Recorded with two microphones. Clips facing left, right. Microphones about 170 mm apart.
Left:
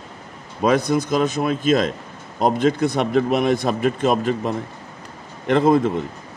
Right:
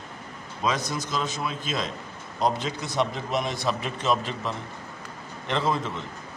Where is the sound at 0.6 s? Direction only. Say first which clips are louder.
Left 10 dB; 55° left (ahead or behind).